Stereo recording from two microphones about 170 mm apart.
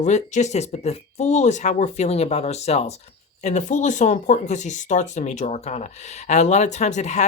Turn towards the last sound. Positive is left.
turn(degrees=45)  # may be behind; listen again after turning